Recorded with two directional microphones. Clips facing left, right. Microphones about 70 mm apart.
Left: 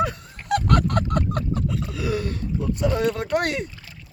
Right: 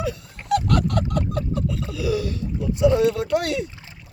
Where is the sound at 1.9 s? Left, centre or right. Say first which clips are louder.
Right 2 dB; left.